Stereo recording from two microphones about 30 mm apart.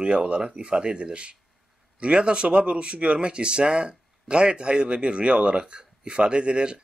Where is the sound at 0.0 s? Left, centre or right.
Right.